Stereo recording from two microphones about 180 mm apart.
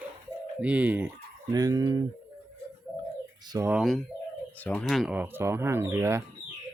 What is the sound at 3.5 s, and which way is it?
Speech, 20° right (ahead or behind).